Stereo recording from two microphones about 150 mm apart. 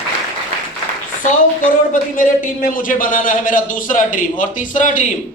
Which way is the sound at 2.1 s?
60° left (ahead or behind).